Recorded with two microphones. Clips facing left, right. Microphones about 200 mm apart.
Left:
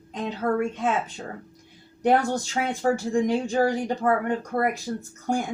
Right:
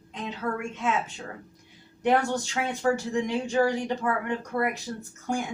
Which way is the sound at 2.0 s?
40° left (ahead or behind).